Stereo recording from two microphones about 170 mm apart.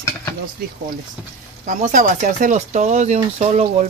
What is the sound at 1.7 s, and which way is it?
Speech, 45° right (ahead or behind).